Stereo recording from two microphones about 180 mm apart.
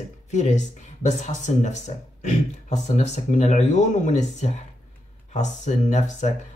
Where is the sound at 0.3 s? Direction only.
40° left (ahead or behind).